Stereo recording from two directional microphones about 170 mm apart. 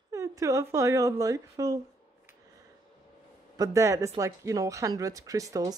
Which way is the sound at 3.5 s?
20° right (ahead or behind).